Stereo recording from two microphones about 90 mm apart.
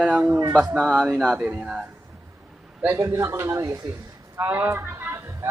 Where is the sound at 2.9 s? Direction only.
30° right (ahead or behind).